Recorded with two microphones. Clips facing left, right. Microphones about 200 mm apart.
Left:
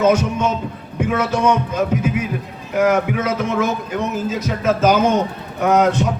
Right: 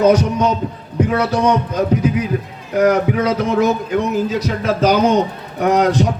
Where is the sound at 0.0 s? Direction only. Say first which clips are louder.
Right 3 dB; 35° right (ahead or behind).